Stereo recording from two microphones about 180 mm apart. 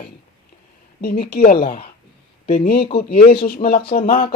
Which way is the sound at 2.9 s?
60° left (ahead or behind).